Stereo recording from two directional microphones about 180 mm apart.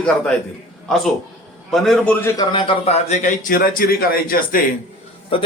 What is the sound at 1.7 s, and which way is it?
Speech, centre (ahead or behind).